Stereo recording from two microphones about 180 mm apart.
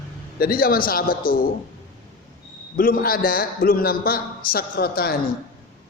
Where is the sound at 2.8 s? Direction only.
55° left (ahead or behind).